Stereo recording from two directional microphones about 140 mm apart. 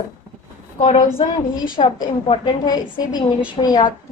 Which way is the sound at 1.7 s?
35° left (ahead or behind).